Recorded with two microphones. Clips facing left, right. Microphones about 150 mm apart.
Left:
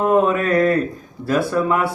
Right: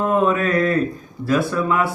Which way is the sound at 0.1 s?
45° left (ahead or behind).